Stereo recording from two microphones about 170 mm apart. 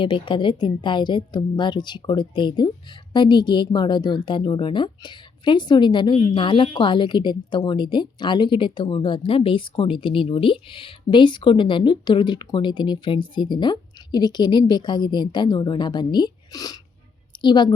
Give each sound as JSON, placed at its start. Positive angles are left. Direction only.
{"t": 0.0, "sound": "a woman's voice", "side_deg": 30}